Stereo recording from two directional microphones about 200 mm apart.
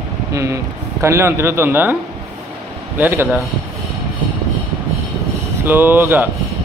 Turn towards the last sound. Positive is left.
turn(degrees=-10)  # may be behind; listen again after turning